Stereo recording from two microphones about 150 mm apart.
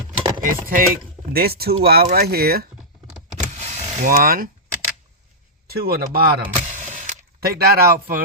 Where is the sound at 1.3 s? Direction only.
90° right.